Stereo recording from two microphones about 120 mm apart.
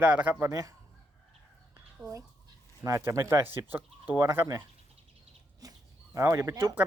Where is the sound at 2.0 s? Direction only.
25° right (ahead or behind).